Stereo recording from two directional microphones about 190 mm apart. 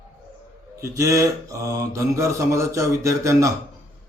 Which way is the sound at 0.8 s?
15° right (ahead or behind).